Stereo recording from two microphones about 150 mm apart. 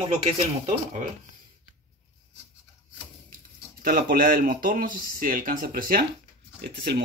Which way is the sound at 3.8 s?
85° right.